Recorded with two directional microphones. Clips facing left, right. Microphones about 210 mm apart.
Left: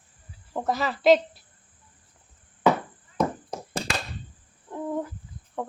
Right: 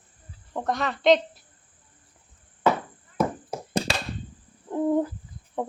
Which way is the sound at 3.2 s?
5° right (ahead or behind).